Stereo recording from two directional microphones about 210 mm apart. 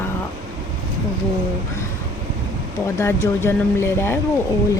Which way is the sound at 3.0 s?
10° left (ahead or behind).